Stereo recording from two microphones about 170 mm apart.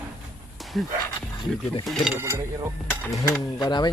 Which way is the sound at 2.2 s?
15° right (ahead or behind).